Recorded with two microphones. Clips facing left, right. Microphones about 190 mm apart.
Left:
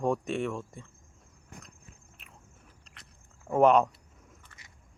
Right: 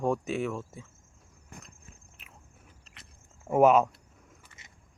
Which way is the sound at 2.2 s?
Centre (ahead or behind).